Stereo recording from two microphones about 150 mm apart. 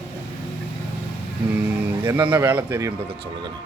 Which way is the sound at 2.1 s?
10° right (ahead or behind).